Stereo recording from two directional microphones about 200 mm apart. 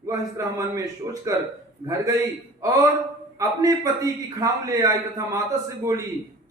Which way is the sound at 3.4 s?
20° right (ahead or behind).